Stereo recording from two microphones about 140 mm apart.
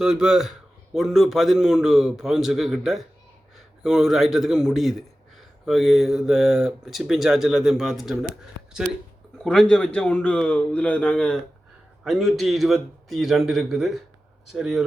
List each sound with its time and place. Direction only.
0.0 s a man's voice: 5° right (ahead or behind)
9.4 s a man's voice: 5° left (ahead or behind)